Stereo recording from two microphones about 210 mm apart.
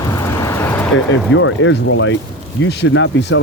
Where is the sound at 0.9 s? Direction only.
65° left (ahead or behind).